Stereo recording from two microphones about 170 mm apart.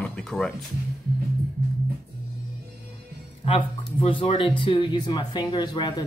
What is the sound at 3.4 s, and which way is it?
Speech, 30° left (ahead or behind).